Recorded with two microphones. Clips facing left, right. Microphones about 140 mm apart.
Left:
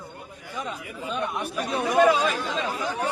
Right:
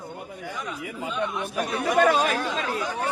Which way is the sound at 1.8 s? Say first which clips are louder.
Left 1 dB; 65° right (ahead or behind).